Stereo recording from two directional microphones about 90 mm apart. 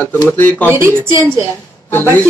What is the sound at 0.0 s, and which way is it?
Speech, 20° left (ahead or behind).